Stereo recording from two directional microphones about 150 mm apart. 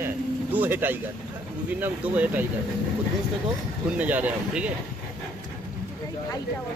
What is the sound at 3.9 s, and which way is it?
Speech, 10° right (ahead or behind).